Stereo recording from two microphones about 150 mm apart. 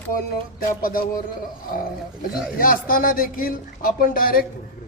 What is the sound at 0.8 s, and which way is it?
Speech, 70° left (ahead or behind).